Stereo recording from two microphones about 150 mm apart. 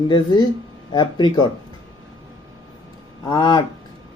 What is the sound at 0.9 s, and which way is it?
Speech, 30° left (ahead or behind).